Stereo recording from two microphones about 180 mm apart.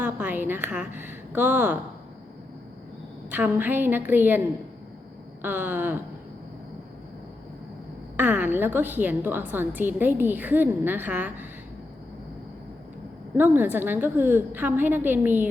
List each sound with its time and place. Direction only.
0.0 s a woman's voice: 10° right (ahead or behind)
3.2 s a woman's voice: 10° right (ahead or behind)
8.1 s a woman's voice: 10° right (ahead or behind)
13.3 s a woman's voice: 10° right (ahead or behind)